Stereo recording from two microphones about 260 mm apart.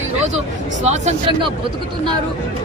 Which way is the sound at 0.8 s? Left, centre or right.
Right.